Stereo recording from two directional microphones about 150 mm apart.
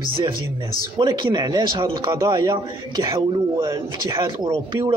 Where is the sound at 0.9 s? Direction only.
30° right (ahead or behind).